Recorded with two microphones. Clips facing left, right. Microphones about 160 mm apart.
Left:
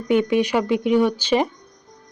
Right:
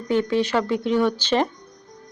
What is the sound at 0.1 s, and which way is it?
Speech, 15° left (ahead or behind).